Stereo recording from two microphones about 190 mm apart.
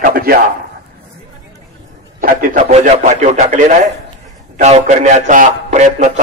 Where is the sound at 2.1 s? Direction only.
45° right (ahead or behind).